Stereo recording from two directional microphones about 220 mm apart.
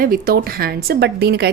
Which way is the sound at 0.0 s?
40° right (ahead or behind).